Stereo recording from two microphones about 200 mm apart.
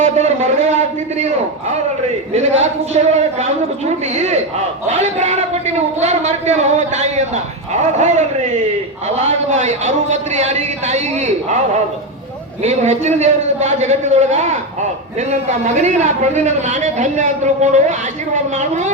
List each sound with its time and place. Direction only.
0.0 s a man's voice: 35° right (ahead or behind)
2.3 s a man's voice: 35° right (ahead or behind)
4.1 s a man's voice: 35° right (ahead or behind)
12.6 s a man's voice: 35° right (ahead or behind)